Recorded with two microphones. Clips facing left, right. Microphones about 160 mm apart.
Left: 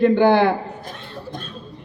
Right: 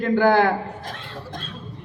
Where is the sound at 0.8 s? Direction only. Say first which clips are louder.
Left 1 dB; 90° right.